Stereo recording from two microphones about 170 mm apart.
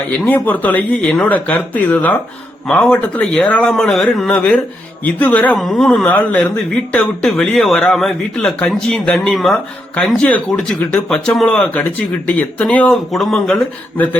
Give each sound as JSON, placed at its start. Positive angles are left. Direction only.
{"t": 0.3, "sound": "speech", "side_deg": 10}